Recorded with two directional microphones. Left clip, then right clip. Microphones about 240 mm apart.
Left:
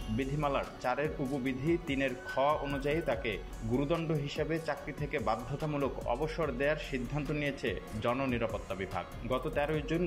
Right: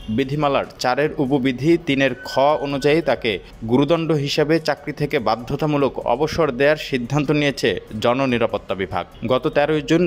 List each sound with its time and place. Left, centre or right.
0.2 s speech: right